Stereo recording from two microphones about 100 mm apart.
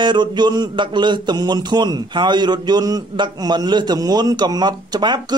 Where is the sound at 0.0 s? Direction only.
50° right (ahead or behind).